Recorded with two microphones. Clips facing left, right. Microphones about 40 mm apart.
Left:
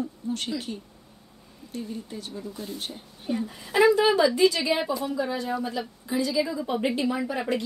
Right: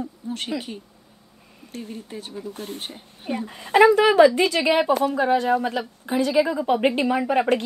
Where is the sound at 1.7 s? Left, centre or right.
Right.